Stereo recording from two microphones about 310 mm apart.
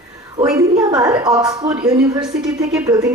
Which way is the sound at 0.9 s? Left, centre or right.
Centre.